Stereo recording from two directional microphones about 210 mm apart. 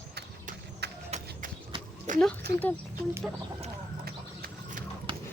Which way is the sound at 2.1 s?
35° right (ahead or behind).